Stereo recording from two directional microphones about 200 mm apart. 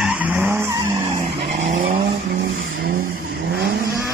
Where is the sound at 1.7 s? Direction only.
45° right (ahead or behind).